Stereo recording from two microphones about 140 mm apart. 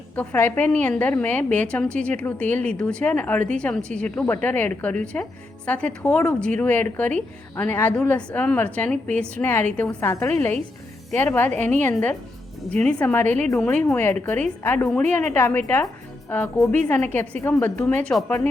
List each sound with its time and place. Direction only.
0.2 s a woman's voice: 10° left (ahead or behind)
13.2 s a woman's voice: 60° right (ahead or behind)
13.6 s a woman's voice: 10° left (ahead or behind)